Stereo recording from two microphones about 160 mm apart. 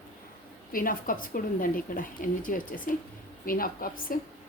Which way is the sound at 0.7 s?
60° left (ahead or behind).